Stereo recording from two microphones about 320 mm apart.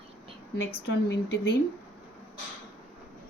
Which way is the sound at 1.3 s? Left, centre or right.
Left.